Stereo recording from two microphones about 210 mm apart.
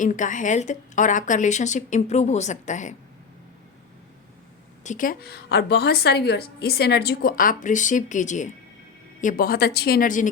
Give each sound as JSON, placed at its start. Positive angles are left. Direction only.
{"t": 0.0, "sound": "a woman's voice", "side_deg": 35}
{"t": 4.8, "sound": "a woman's voice", "side_deg": 35}